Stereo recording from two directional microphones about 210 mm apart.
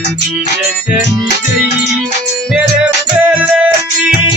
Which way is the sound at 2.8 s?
5° right (ahead or behind).